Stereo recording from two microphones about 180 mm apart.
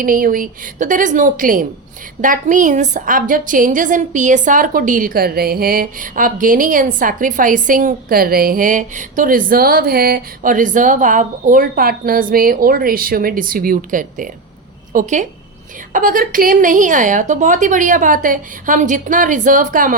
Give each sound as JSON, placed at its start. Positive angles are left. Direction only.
{"t": 0.0, "sound": "a woman's voice", "side_deg": -50}